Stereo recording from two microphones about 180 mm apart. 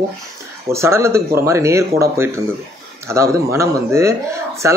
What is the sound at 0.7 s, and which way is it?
A child's voice, 15° right (ahead or behind).